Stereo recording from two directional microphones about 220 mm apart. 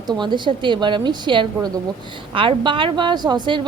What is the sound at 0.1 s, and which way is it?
A woman's voice, 20° right (ahead or behind).